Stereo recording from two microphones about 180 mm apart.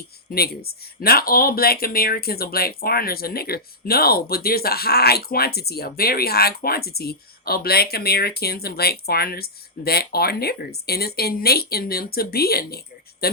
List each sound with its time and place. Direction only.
0.3 s speech: 60° left (ahead or behind)